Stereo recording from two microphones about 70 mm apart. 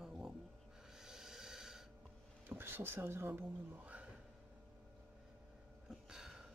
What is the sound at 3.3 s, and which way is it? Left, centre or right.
Speech, right.